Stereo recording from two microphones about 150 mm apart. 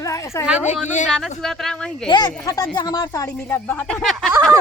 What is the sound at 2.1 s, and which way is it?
Speech, 30° left (ahead or behind).